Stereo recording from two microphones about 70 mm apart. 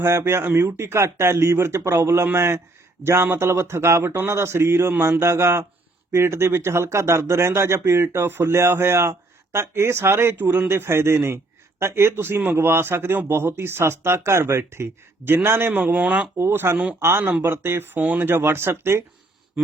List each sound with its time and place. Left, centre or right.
0.0 s a man's voice: right
10.3 s a man's voice: right
16.4 s a man's voice: right